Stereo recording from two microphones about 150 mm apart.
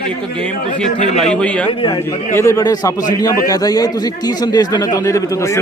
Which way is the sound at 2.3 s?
20° left (ahead or behind).